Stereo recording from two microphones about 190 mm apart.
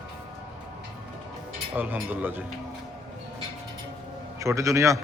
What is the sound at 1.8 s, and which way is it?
Speech, 10° right (ahead or behind).